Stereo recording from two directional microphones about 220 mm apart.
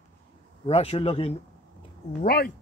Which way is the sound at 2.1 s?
40° left (ahead or behind).